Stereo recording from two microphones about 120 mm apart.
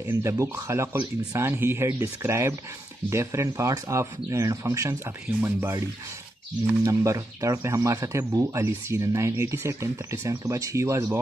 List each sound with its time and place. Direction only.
0.0 s speech: 20° right (ahead or behind)